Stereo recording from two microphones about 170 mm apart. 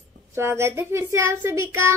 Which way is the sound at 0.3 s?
15° right (ahead or behind).